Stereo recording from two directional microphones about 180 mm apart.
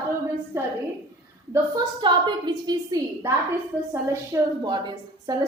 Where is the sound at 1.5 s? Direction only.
20° right (ahead or behind).